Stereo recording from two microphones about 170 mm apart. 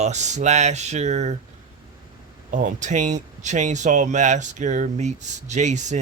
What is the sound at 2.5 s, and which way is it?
Speech, 45° right (ahead or behind).